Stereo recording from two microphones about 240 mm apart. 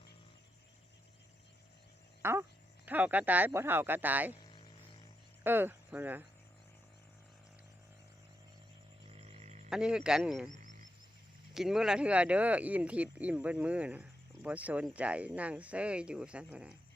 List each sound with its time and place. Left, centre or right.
2.2 s speech: centre
5.4 s speech: centre
9.0 s frog: right
9.6 s speech: centre
10.5 s a sound: right
11.5 s speech: centre